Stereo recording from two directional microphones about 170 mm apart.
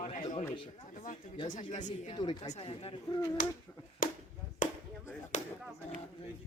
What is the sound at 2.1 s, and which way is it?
Speech, 30° left (ahead or behind).